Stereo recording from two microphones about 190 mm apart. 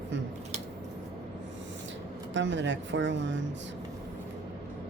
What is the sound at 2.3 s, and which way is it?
Speech, 75° right (ahead or behind).